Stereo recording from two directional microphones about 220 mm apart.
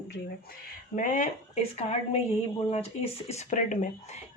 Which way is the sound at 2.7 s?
25° left (ahead or behind).